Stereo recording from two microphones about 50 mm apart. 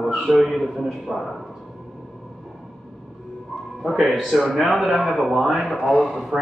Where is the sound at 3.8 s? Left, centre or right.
Centre.